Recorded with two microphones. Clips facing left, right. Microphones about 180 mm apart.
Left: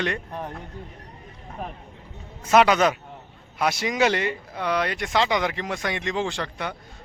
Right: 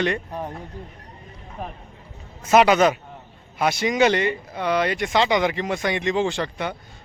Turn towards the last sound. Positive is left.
turn(degrees=0)  # may be behind; listen again after turning